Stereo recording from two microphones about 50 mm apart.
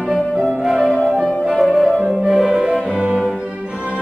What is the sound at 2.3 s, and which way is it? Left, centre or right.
Music, centre.